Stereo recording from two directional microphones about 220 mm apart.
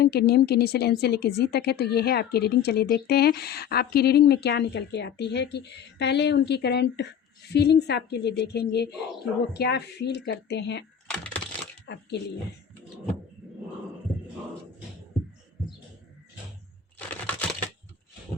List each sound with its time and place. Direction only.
0.0 s speech: 45° left (ahead or behind)
11.1 s computer keyboard: 5° left (ahead or behind)
11.9 s speech: 50° left (ahead or behind)
17.3 s a sound: 5° left (ahead or behind)